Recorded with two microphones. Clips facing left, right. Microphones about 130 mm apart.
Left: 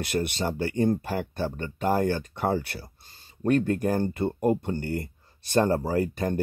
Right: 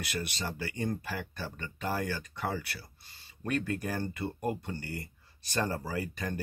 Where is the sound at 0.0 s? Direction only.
50° left (ahead or behind).